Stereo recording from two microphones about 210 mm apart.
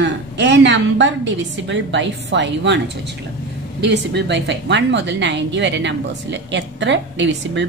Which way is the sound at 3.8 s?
55° right (ahead or behind).